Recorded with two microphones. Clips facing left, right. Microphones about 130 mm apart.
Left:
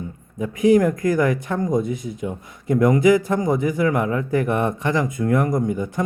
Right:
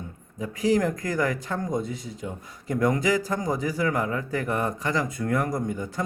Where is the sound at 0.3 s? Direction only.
20° left (ahead or behind).